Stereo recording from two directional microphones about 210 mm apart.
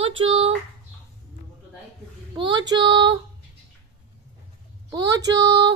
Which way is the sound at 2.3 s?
20° right (ahead or behind).